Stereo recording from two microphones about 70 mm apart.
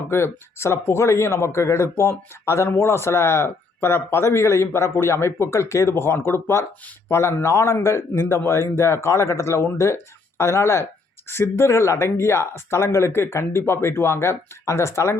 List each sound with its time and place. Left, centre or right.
0.1 s speech: left